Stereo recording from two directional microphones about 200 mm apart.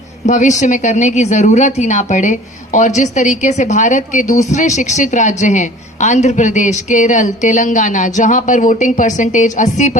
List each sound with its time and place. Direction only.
0.3 s speech: 35° left (ahead or behind)